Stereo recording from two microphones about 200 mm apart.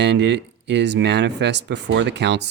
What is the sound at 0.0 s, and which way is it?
Speech, 60° right (ahead or behind).